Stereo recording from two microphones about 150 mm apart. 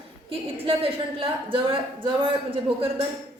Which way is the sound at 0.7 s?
35° right (ahead or behind).